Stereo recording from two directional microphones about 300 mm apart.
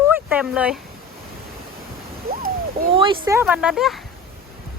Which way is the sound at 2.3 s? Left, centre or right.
Right.